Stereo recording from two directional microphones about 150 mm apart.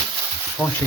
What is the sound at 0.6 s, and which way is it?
Speech, 10° left (ahead or behind).